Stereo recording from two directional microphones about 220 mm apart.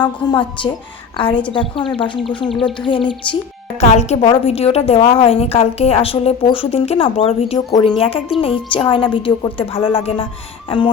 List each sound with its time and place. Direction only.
0.0 s a woman's voice: 20° left (ahead or behind)
2.5 s speech: centre (ahead or behind)
2.8 s a woman's voice: 20° left (ahead or behind)